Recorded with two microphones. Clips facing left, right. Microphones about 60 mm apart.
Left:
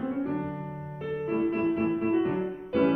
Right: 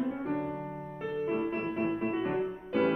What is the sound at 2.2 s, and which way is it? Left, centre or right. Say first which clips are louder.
Music: left 3 dB; centre.